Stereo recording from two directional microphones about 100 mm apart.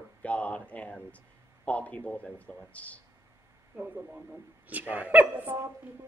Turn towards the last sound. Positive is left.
turn(degrees=-15)  # may be behind; listen again after turning